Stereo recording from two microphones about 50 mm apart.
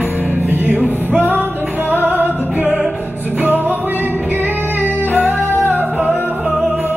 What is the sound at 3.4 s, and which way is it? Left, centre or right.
Music, right.